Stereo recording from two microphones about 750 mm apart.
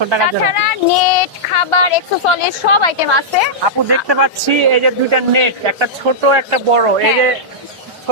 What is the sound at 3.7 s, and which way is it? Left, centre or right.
Speech, right.